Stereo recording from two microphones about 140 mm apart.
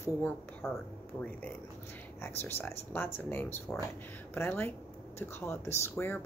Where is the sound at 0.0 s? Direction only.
15° left (ahead or behind).